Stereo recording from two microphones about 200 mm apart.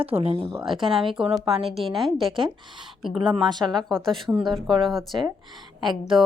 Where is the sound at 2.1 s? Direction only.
25° right (ahead or behind).